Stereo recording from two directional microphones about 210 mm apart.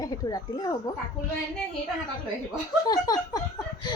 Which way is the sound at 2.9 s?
20° left (ahead or behind).